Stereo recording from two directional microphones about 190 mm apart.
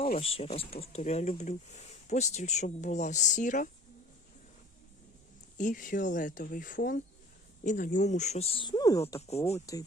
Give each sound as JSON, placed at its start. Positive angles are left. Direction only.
{"t": 0.2, "sound": "speech", "side_deg": 30}
{"t": 5.5, "sound": "speech", "side_deg": 45}